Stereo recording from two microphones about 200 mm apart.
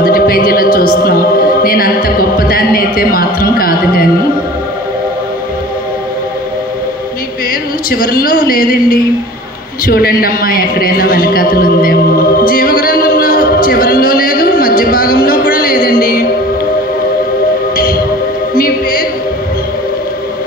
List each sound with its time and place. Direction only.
0.0 s music: 45° left (ahead or behind)
7.9 s a man's voice: 45° left (ahead or behind)
18.5 s music: 45° left (ahead or behind)